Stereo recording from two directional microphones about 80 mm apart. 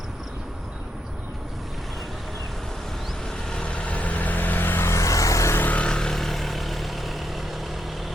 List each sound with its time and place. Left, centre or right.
3.2 s vehicle: centre; by 5.5 s left
5.5 s vehicle: centre